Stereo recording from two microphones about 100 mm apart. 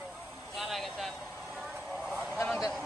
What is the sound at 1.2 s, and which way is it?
Vehicle, 20° right (ahead or behind).